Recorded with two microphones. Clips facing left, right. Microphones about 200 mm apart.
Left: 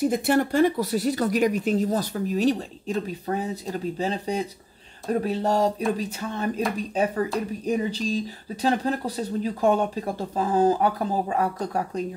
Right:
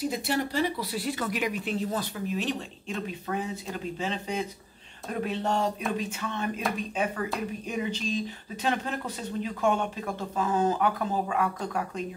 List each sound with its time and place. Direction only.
0.0 s speech: 50° left (ahead or behind)